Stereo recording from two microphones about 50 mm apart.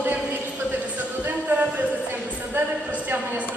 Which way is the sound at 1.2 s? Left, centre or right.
Right.